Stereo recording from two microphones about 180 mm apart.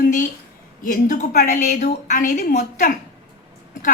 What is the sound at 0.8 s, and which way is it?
A woman's voice, 50° left (ahead or behind).